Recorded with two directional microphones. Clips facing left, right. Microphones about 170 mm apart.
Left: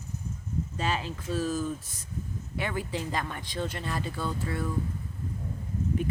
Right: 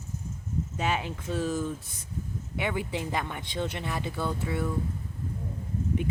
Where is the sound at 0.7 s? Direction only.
15° right (ahead or behind).